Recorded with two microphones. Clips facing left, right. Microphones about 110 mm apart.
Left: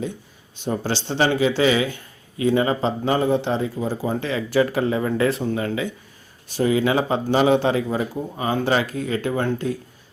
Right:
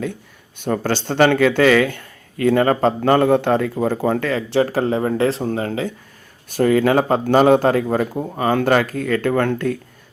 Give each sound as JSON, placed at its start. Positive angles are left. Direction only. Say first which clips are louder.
{"t": 0.6, "sound": "speech", "louder": "right 4 dB", "side_deg": -55}
{"t": 4.6, "sound": "speech", "louder": "right 2 dB", "side_deg": -40}
{"t": 6.5, "sound": "speech", "louder": "right 4 dB", "side_deg": -50}